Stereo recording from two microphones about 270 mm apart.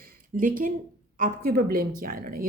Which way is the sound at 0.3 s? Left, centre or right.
Right.